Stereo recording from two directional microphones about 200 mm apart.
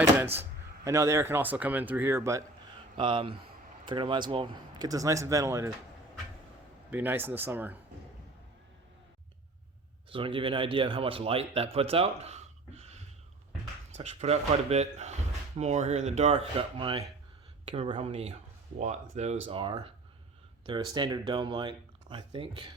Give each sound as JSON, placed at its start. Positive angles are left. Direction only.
{"t": 0.9, "sound": "speech", "side_deg": -15}
{"t": 3.0, "sound": "speech", "side_deg": -25}
{"t": 6.9, "sound": "speech", "side_deg": -10}
{"t": 10.1, "sound": "speech", "side_deg": -25}
{"t": 14.0, "sound": "speech", "side_deg": -30}